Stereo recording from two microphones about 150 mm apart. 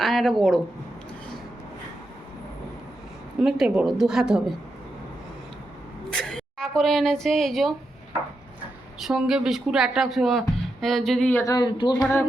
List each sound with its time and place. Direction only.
0.0 s speech: centre (ahead or behind)
3.4 s speech: centre (ahead or behind)
6.1 s a sound: 5° left (ahead or behind)
9.0 s speech: centre (ahead or behind)
11.4 s speech: 25° left (ahead or behind)